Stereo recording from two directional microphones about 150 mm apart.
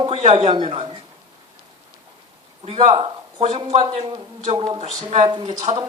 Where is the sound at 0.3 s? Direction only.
30° right (ahead or behind).